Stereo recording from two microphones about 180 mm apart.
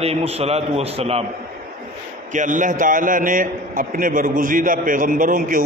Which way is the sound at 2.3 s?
45° right (ahead or behind).